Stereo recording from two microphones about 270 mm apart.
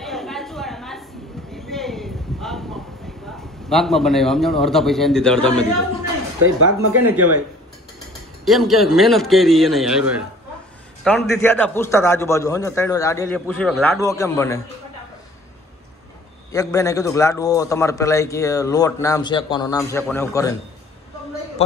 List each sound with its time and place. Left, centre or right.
0.0 s a sound: centre
3.3 s a man's voice: centre
6.4 s speech: right
8.5 s a man's voice: centre
16.5 s a man's voice: centre